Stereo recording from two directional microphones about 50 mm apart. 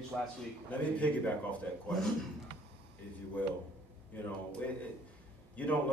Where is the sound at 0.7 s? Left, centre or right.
Left.